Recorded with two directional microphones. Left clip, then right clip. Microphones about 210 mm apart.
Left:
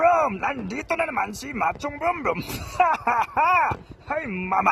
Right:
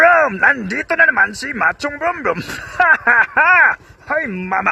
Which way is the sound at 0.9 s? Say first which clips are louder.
Right 12 dB; 5° right (ahead or behind).